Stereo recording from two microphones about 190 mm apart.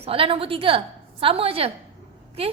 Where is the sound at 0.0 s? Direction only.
30° right (ahead or behind).